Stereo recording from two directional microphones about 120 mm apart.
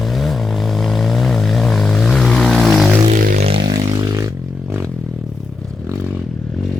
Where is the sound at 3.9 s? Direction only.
30° right (ahead or behind).